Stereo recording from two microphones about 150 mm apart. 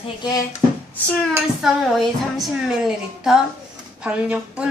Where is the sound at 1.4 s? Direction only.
5° right (ahead or behind).